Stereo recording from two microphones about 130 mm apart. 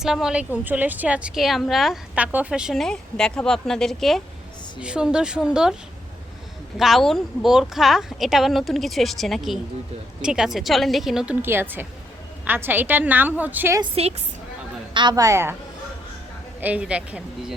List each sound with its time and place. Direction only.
0.0 s a woman's voice: 5° right (ahead or behind)
6.7 s a woman's voice: centre (ahead or behind)
11.4 s a woman's voice: 15° right (ahead or behind)
14.0 s a woman's voice: 50° right (ahead or behind)
14.9 s a woman's voice: 30° right (ahead or behind)
16.6 s a woman's voice: 10° right (ahead or behind)